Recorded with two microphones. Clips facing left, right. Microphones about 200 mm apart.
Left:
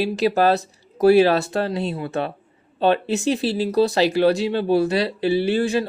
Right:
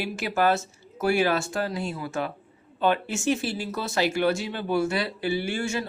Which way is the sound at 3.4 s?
35° left (ahead or behind).